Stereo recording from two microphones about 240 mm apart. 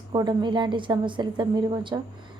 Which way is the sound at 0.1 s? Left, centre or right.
Centre.